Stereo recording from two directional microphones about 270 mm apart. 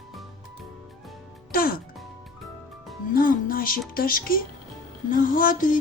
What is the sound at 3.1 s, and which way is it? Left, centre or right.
Music, left.